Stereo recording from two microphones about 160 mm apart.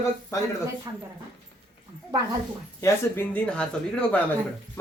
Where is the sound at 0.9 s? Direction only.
20° right (ahead or behind).